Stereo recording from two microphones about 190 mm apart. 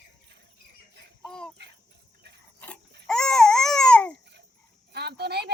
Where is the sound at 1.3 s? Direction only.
5° left (ahead or behind).